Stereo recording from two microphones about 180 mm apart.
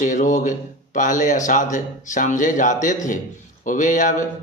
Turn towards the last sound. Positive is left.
turn(degrees=45)  # may be behind; listen again after turning